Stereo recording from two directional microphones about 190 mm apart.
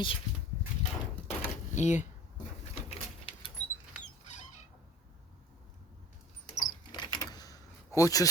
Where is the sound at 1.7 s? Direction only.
40° left (ahead or behind).